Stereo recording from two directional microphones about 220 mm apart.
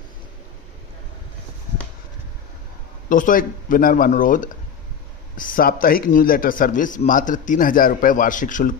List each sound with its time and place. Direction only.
3.1 s a man's voice: 40° left (ahead or behind)